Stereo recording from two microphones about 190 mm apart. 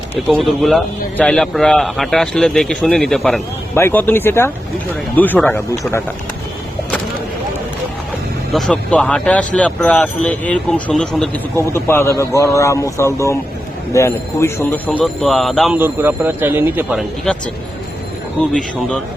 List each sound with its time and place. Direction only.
0.3 s a man's voice: centre (ahead or behind)
8.5 s a man's voice: 5° left (ahead or behind)
15.8 s speech: 10° right (ahead or behind)